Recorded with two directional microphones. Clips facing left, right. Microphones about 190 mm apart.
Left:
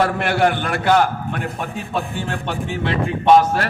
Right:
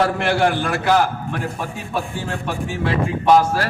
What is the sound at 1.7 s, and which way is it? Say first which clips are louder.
Speech: left 1 dB; 25° left (ahead or behind).